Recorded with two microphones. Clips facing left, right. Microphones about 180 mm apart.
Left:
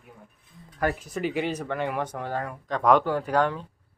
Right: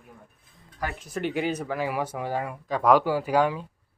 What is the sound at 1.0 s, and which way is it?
Speech, centre (ahead or behind).